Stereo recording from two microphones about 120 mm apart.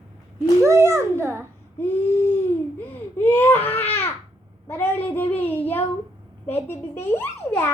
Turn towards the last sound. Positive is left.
turn(degrees=20)  # may be behind; listen again after turning